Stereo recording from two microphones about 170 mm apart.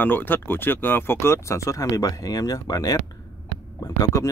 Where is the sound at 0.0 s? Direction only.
10° left (ahead or behind).